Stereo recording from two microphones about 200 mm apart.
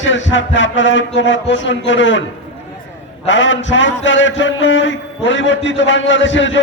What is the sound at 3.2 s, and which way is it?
A man's voice, 65° left (ahead or behind).